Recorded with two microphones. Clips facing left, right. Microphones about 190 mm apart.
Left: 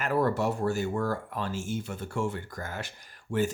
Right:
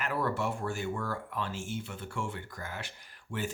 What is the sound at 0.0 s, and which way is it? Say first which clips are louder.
Speech: left 6 dB; 40° left (ahead or behind).